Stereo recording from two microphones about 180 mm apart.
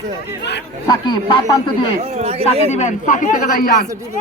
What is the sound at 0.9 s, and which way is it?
Speech, 25° left (ahead or behind).